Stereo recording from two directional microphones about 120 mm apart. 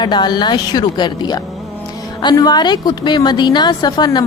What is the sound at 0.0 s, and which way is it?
A woman's voice, 40° left (ahead or behind).